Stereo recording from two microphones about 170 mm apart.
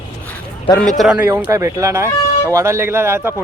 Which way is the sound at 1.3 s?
15° right (ahead or behind).